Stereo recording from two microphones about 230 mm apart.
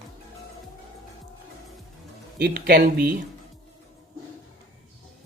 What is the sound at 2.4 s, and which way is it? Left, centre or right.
Speech, right.